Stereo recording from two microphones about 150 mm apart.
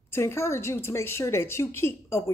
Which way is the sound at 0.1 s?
15° left (ahead or behind).